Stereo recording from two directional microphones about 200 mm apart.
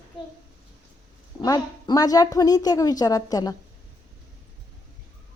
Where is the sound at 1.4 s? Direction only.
20° left (ahead or behind).